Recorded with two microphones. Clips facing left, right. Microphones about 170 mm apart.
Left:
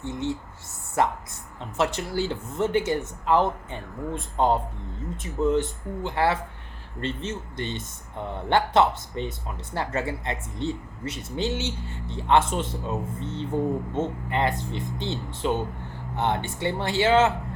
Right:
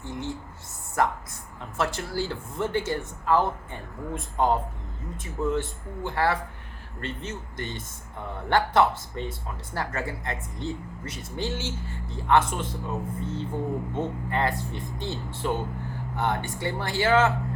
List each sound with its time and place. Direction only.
0.0 s speech: 20° left (ahead or behind)